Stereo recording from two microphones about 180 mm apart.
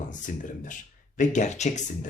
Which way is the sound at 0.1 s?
45° left (ahead or behind).